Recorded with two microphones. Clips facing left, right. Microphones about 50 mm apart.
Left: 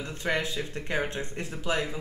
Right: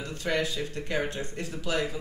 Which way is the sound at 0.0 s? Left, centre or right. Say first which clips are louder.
Even; left.